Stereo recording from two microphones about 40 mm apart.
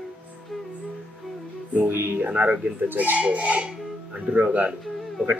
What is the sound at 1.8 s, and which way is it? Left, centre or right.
Speech, right.